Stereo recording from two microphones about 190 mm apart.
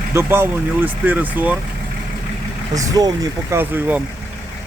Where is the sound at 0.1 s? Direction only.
15° right (ahead or behind).